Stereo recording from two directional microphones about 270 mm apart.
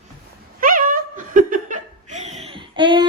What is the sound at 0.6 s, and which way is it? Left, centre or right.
Laughter, right.